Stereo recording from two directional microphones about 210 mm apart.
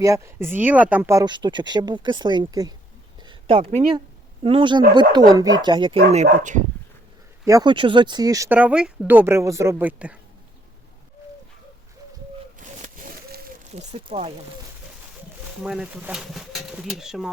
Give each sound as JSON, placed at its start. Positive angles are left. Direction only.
{"t": 0.0, "sound": "speech", "side_deg": -15}
{"t": 3.2, "sound": "a sound", "side_deg": -25}
{"t": 4.4, "sound": "speech", "side_deg": -25}
{"t": 6.2, "sound": "speech", "side_deg": -35}
{"t": 7.4, "sound": "speech", "side_deg": -20}
{"t": 12.5, "sound": "a sound", "side_deg": -35}
{"t": 15.6, "sound": "speech", "side_deg": -5}